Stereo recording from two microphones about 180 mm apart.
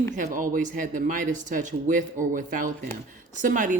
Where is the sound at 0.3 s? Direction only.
45° right (ahead or behind).